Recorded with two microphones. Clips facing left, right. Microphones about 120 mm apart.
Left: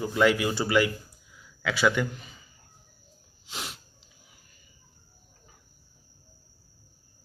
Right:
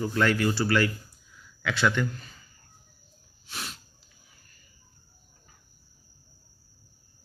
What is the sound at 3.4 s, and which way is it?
Sneeze, 15° left (ahead or behind).